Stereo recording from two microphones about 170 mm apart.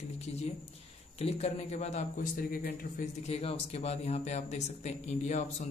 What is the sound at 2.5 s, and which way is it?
Speech, 60° left (ahead or behind).